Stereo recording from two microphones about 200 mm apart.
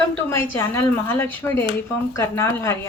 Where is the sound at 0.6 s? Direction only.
10° left (ahead or behind).